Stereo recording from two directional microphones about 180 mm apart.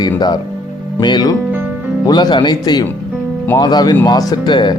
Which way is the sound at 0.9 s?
25° left (ahead or behind).